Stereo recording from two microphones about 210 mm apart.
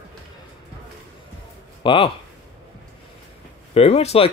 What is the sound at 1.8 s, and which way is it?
Speech, 25° left (ahead or behind).